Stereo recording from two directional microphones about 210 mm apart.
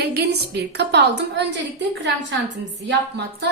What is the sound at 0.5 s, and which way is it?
Speech, 50° right (ahead or behind).